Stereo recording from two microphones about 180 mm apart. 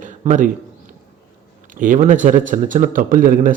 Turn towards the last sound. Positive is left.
turn(degrees=-50)  # may be behind; listen again after turning